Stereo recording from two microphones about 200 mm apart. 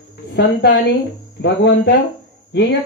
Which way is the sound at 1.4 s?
55° left (ahead or behind).